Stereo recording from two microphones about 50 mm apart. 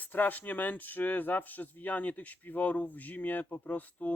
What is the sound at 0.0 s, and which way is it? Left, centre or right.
Speech, left.